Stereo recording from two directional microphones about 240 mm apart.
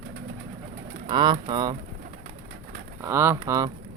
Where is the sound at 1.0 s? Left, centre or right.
Centre.